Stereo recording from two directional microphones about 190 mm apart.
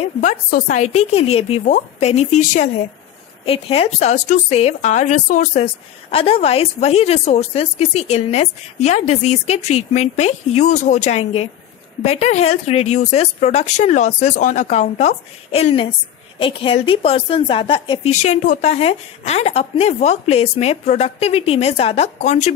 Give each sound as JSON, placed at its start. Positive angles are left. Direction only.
{"t": 0.2, "sound": "a woman's voice", "side_deg": 40}